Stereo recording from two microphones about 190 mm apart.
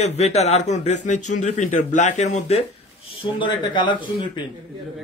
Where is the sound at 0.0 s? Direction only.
35° left (ahead or behind).